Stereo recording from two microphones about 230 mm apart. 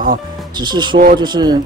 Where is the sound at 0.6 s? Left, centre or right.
Centre.